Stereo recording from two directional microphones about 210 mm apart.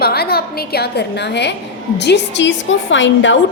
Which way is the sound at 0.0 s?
50° left (ahead or behind).